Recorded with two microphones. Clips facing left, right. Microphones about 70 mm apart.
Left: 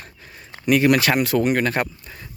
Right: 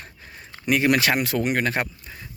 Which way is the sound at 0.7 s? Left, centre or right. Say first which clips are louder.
Left 3 dB; centre.